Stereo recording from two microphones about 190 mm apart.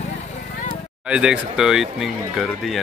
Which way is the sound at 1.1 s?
5° right (ahead or behind).